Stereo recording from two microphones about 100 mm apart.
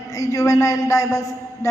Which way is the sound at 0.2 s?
35° left (ahead or behind).